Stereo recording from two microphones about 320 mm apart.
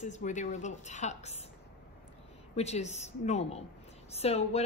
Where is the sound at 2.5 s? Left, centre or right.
Centre.